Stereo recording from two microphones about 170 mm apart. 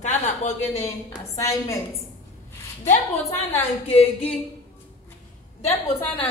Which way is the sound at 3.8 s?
35° left (ahead or behind).